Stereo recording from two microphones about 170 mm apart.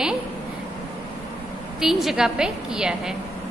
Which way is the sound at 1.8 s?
Centre (ahead or behind).